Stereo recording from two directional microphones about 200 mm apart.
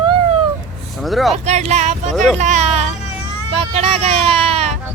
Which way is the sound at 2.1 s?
Centre (ahead or behind).